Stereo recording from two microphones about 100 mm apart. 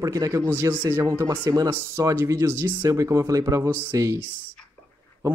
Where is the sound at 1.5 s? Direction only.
40° right (ahead or behind).